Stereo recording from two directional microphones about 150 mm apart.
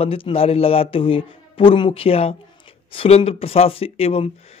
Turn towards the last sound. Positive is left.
turn(degrees=40)  # may be behind; listen again after turning